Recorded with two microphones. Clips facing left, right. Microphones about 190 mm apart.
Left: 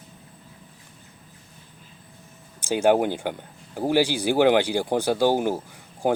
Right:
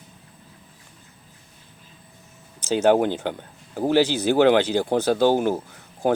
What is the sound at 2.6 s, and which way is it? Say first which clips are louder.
Speech: right 2 dB; 10° left (ahead or behind).